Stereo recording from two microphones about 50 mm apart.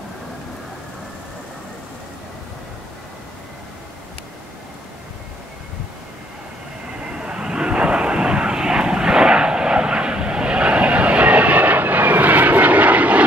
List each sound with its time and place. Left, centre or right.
7.0 s vehicle: right